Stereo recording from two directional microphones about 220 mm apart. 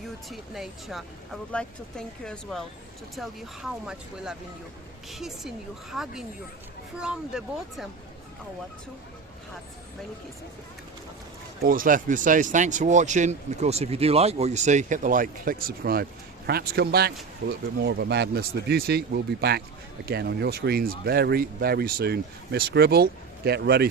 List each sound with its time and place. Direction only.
0.3 s speech: centre (ahead or behind)
11.6 s speech: 40° right (ahead or behind)